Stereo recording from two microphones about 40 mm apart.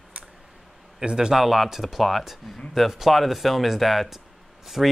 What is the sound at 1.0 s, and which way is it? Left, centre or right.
Speech, right.